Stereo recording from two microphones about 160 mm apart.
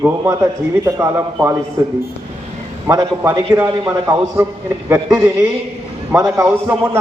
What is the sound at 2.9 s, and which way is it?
A man's voice, 20° right (ahead or behind).